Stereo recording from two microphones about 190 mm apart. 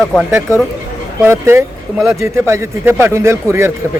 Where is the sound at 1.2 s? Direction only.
15° right (ahead or behind).